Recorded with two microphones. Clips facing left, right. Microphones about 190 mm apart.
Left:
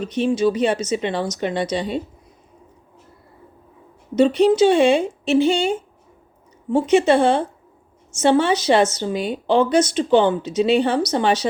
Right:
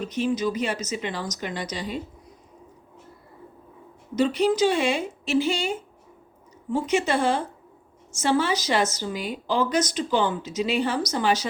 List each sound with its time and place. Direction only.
0.2 s speech: 30° left (ahead or behind)
4.1 s speech: 25° left (ahead or behind)
6.7 s speech: 25° left (ahead or behind)